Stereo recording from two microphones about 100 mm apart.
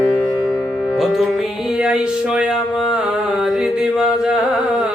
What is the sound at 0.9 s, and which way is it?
Music, centre (ahead or behind).